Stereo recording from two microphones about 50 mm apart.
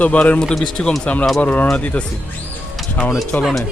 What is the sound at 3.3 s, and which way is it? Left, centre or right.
Speech, left.